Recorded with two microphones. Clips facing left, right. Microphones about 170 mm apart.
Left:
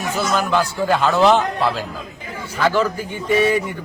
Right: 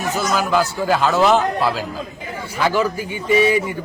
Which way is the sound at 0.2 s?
Centre (ahead or behind).